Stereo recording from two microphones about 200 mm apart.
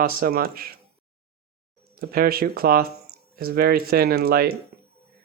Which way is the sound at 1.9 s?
50° right (ahead or behind).